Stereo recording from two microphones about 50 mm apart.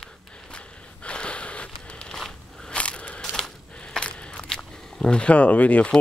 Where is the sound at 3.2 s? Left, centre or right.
Centre.